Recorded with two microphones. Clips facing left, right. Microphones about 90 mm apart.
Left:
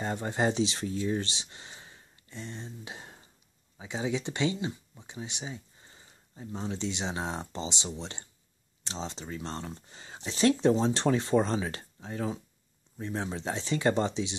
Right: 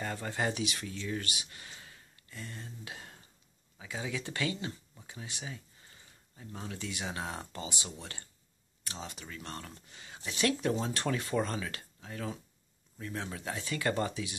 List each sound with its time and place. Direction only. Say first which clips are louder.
0.0 s speech: left 5 dB; 20° left (ahead or behind)